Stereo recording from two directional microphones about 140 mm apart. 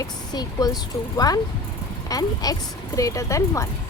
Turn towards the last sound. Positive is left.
turn(degrees=20)  # may be behind; listen again after turning